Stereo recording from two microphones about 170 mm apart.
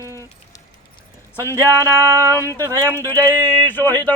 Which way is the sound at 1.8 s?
20° right (ahead or behind).